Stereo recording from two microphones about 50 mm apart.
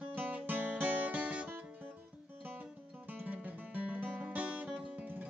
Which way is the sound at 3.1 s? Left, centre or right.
Right.